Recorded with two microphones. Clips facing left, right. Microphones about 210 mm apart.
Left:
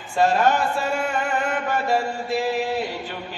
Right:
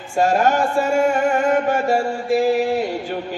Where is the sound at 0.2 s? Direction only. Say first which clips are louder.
Right 2 dB; 45° right (ahead or behind).